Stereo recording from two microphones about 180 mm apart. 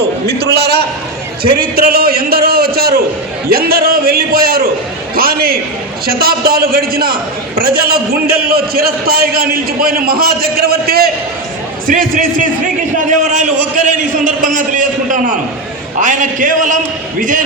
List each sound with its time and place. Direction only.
0.3 s a man's voice: 65° right (ahead or behind)